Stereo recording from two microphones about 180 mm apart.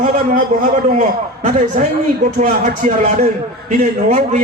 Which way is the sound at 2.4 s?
40° right (ahead or behind).